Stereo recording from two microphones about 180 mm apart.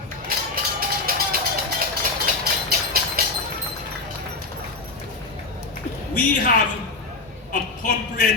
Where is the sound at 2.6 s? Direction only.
60° right (ahead or behind).